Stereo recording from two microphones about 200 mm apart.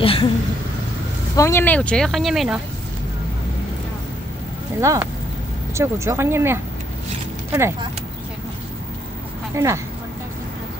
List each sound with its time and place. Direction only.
0.0 s speech: 25° left (ahead or behind)
1.3 s speech: 15° left (ahead or behind)
4.7 s speech: 15° right (ahead or behind)
9.6 s speech: 15° right (ahead or behind)